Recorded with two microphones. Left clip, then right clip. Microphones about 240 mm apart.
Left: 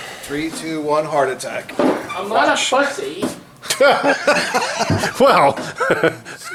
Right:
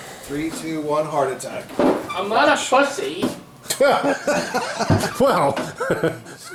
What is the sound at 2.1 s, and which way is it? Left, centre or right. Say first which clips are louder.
Speech: left 1 dB; centre.